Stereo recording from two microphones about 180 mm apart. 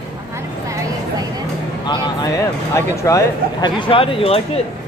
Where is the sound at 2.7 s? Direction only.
15° left (ahead or behind); by 4.6 s 35° left (ahead or behind).